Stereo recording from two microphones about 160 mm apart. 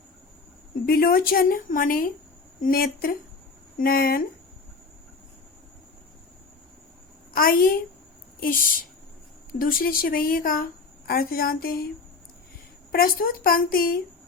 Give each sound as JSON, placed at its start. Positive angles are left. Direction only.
{"t": 0.9, "sound": "a woman's voice", "side_deg": 65}
{"t": 7.3, "sound": "a woman's voice", "side_deg": 65}
{"t": 12.9, "sound": "a woman's voice", "side_deg": 65}